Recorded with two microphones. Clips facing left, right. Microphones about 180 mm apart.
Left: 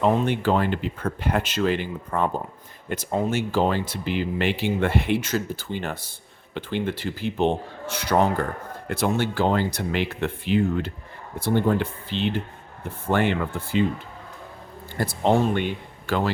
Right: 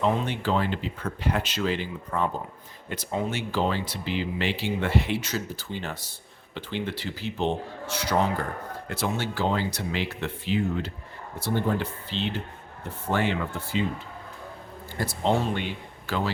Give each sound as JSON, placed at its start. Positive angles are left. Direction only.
{"t": 0.0, "sound": "speech", "side_deg": 55}
{"t": 15.0, "sound": "speech", "side_deg": 55}